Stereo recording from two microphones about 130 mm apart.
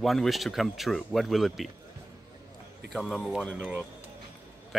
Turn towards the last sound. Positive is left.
turn(degrees=5)  # may be behind; listen again after turning